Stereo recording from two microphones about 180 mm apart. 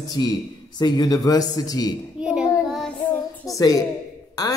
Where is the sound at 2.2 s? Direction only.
5° right (ahead or behind).